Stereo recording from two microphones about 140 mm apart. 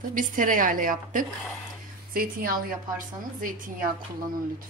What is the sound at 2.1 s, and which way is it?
A woman's voice, 90° right.